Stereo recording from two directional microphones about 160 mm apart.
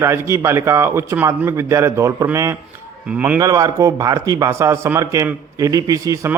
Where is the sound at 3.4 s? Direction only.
20° right (ahead or behind).